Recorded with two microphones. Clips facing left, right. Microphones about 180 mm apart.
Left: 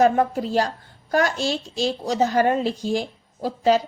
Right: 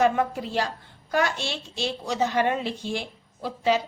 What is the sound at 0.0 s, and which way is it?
A woman's voice, 40° left (ahead or behind).